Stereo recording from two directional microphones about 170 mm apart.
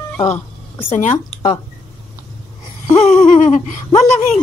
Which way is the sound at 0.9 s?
40° left (ahead or behind).